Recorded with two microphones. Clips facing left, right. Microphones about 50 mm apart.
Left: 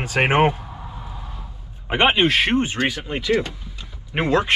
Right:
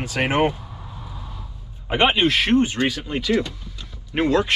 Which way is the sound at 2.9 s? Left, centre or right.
Centre.